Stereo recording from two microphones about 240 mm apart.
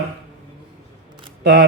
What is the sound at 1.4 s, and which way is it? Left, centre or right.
Speech, right.